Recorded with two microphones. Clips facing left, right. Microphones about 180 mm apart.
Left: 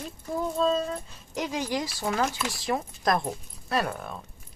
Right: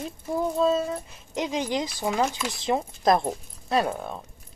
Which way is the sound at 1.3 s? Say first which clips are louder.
Right 2 dB; 20° right (ahead or behind).